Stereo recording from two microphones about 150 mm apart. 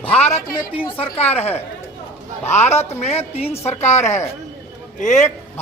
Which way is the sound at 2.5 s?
50° left (ahead or behind).